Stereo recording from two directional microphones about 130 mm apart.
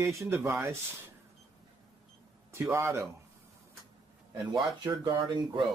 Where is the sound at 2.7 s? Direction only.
20° right (ahead or behind).